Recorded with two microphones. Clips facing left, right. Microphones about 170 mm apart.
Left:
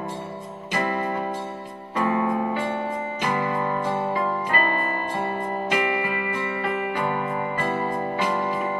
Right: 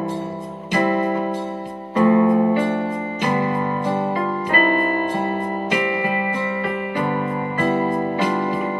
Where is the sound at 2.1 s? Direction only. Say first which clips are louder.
Right 9 dB; 40° right (ahead or behind).